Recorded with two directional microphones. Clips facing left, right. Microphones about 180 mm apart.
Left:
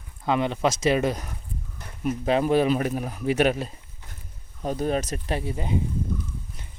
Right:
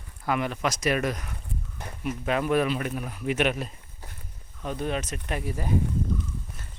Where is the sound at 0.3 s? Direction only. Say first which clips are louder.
Left 4 dB; 25° left (ahead or behind).